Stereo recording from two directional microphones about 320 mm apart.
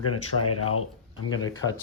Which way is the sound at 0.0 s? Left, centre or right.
Left.